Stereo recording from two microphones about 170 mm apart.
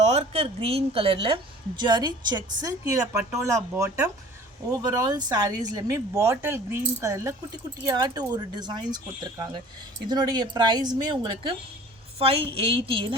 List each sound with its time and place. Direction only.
0.0 s a woman's voice: 40° right (ahead or behind)